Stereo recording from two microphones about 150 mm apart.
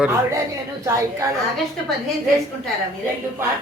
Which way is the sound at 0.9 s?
20° right (ahead or behind).